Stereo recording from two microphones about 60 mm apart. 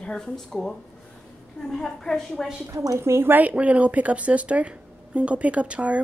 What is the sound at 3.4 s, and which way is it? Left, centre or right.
Speech, right.